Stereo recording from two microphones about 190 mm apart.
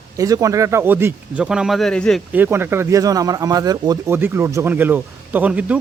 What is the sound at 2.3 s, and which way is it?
Speech, 10° right (ahead or behind).